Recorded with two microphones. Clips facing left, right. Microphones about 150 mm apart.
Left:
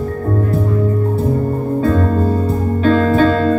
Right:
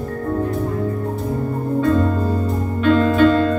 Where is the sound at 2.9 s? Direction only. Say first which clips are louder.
Left 1 dB; 40° left (ahead or behind).